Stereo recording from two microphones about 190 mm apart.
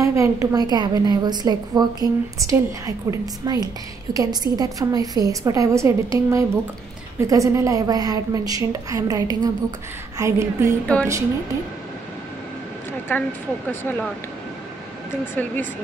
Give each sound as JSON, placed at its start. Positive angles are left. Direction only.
{"t": 0.0, "sound": "a woman's voice", "side_deg": -15}
{"t": 10.9, "sound": "speech", "side_deg": 5}
{"t": 13.1, "sound": "speech", "side_deg": 10}
{"t": 15.3, "sound": "speech", "side_deg": 10}